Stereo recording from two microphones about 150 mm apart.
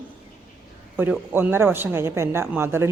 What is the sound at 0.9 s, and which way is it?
Speech, 10° right (ahead or behind).